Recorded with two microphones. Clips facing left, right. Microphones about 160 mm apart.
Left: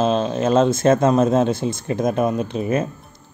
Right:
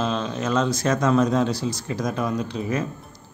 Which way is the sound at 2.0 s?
25° left (ahead or behind).